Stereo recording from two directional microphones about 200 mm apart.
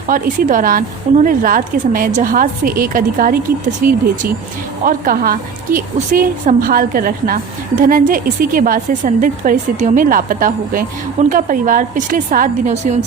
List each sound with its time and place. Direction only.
0.1 s a woman's voice: 40° right (ahead or behind)